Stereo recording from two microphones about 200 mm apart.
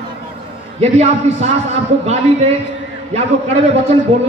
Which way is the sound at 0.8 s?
30° right (ahead or behind).